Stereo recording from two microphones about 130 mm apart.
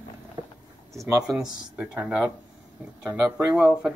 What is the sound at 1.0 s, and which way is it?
Speech, 25° right (ahead or behind).